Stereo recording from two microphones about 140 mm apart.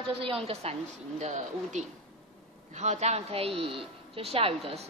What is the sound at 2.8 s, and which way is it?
A woman's voice, 55° right (ahead or behind).